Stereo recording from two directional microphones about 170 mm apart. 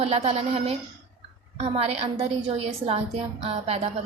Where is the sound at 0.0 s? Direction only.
40° right (ahead or behind).